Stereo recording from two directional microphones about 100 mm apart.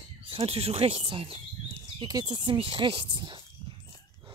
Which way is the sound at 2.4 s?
60° right (ahead or behind).